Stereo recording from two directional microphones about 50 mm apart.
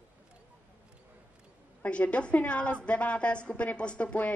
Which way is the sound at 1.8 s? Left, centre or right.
Left.